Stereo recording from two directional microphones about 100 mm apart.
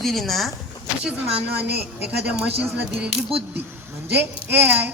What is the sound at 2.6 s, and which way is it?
Speech, 15° right (ahead or behind).